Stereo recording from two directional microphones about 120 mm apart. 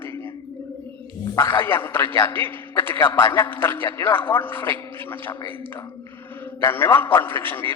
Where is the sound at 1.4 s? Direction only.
40° left (ahead or behind).